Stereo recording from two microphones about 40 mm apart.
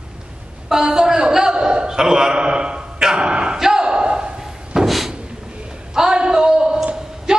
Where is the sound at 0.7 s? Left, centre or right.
Centre.